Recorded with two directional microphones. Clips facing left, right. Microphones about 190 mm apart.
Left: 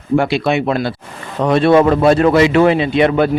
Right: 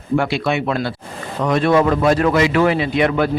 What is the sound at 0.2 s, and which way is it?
Speech, 20° left (ahead or behind).